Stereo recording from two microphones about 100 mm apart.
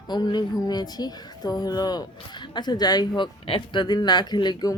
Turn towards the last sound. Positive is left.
turn(degrees=40)  # may be behind; listen again after turning